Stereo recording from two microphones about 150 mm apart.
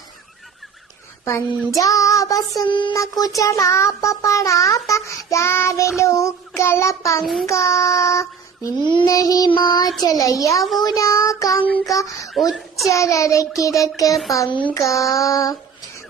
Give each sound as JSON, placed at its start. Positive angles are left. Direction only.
{"t": 1.8, "sound": "child singing", "side_deg": 20}
{"t": 2.6, "sound": "a sound", "side_deg": 30}
{"t": 2.9, "sound": "child singing", "side_deg": 20}
{"t": 7.2, "sound": "child singing", "side_deg": 0}
{"t": 7.4, "sound": "child singing", "side_deg": 20}
{"t": 10.6, "sound": "child singing", "side_deg": 0}
{"t": 10.8, "sound": "child singing", "side_deg": 20}
{"t": 11.9, "sound": "a sound", "side_deg": 20}
{"t": 12.3, "sound": "a child's voice", "side_deg": 0}
{"t": 12.9, "sound": "child singing", "side_deg": 20}
{"t": 14.5, "sound": "a sound", "side_deg": 30}
{"t": 14.8, "sound": "child singing", "side_deg": 20}